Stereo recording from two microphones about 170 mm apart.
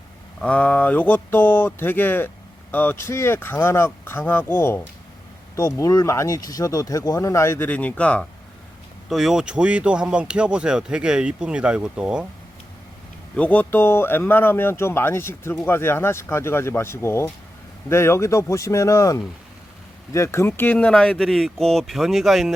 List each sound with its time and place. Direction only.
0.4 s speech: 10° left (ahead or behind)
13.3 s speech: 10° left (ahead or behind)